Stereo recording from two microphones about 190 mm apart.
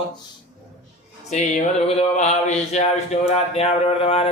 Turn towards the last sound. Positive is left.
turn(degrees=30)  # may be behind; listen again after turning